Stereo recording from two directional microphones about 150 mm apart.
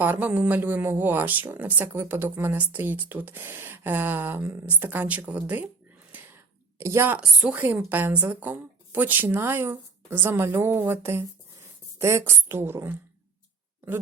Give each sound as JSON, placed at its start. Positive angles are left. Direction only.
{"t": 0.0, "sound": "speech", "side_deg": -10}
{"t": 6.1, "sound": "whispering", "side_deg": -10}
{"t": 6.7, "sound": "a woman's voice", "side_deg": -20}